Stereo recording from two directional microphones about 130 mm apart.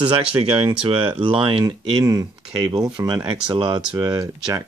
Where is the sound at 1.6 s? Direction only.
30° right (ahead or behind).